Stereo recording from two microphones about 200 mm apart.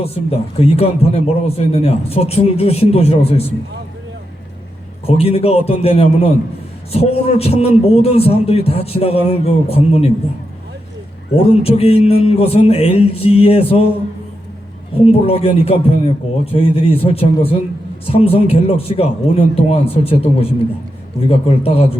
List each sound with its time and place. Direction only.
0.0 s a man's voice: 30° left (ahead or behind)
5.0 s a man's voice: 30° left (ahead or behind)
11.3 s a man's voice: 30° left (ahead or behind)
15.1 s a man's voice: 30° left (ahead or behind)